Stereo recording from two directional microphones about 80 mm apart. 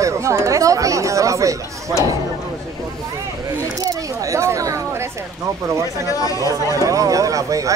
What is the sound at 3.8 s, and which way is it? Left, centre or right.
Single-lens reflex camera, right.